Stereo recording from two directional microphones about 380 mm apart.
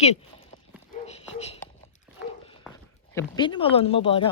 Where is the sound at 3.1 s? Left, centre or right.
Centre.